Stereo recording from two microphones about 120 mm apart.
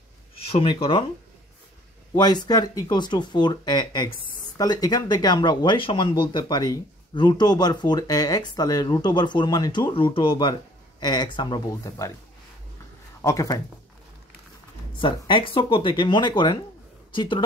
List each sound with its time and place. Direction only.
0.5 s speech: 50° left (ahead or behind)
2.1 s speech: 35° left (ahead or behind)
13.2 s speech: 30° left (ahead or behind)
15.0 s speech: 45° left (ahead or behind)